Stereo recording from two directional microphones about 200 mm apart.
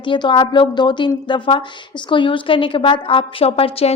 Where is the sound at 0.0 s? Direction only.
25° left (ahead or behind).